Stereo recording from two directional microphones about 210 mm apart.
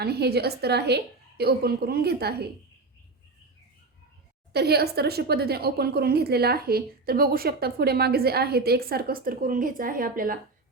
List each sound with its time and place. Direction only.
0.0 s a woman's voice: 50° right (ahead or behind)
4.5 s a woman's voice: 50° right (ahead or behind)